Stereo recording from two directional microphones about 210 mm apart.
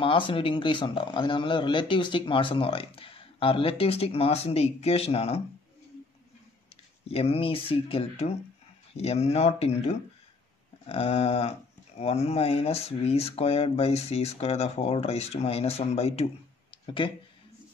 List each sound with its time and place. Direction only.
0.0 s speech: 25° left (ahead or behind)
7.1 s speech: 30° left (ahead or behind)